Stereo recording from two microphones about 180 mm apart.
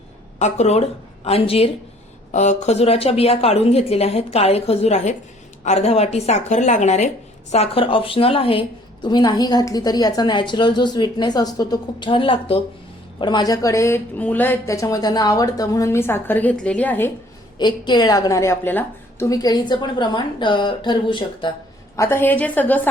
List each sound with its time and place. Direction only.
0.3 s a woman's voice: 40° left (ahead or behind); by 17.1 s 10° left (ahead or behind)
17.6 s a woman's voice: 25° left (ahead or behind)
21.9 s speech: 15° left (ahead or behind)